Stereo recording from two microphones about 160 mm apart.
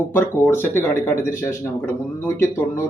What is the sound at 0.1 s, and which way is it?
A man's voice, 15° left (ahead or behind).